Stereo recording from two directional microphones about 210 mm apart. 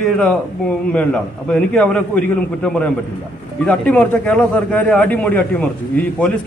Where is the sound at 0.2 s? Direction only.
5° left (ahead or behind).